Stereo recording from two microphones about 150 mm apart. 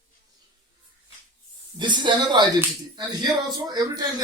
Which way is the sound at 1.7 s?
30° right (ahead or behind).